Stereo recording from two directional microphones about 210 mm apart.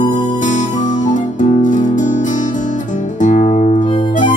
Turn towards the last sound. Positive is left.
turn(degrees=35)  # may be behind; listen again after turning